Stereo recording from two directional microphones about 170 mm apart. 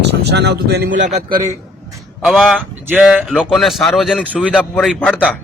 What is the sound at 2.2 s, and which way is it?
Speech, centre (ahead or behind).